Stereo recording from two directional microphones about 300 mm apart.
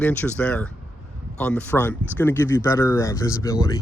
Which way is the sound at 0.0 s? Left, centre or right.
Centre.